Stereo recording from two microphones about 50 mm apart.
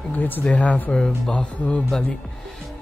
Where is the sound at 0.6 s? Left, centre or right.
Left.